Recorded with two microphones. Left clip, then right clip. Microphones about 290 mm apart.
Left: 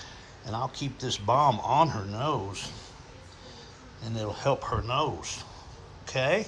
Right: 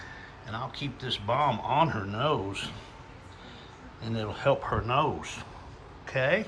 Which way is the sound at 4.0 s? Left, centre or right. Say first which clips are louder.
Right 1 dB; centre.